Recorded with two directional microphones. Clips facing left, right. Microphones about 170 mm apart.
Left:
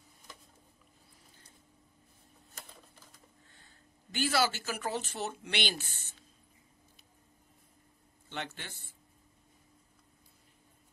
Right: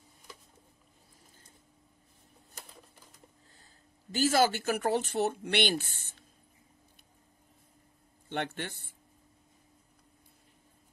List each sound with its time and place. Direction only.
4.1 s speech: 45° right (ahead or behind)
8.5 s speech: 55° right (ahead or behind)